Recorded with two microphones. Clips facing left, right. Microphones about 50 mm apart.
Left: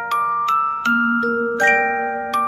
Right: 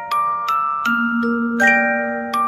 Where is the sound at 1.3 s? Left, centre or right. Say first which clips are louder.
Right 1 dB; centre.